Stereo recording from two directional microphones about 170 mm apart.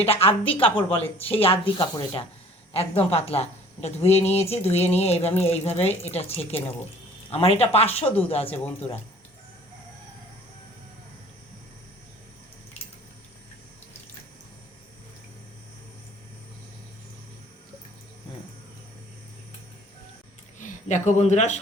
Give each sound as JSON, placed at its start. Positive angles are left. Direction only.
{"t": 0.0, "sound": "speech", "side_deg": 35}
{"t": 20.6, "sound": "speech", "side_deg": 45}